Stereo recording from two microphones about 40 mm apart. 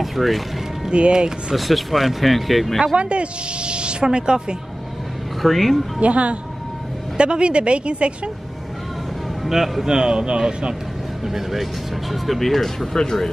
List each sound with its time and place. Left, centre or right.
0.0 s music: centre
0.8 s speech: right
1.5 s speech: centre
3.0 s speech: right
5.4 s speech: centre
5.9 s a woman's voice: right
9.4 s speech: centre
11.2 s speech: centre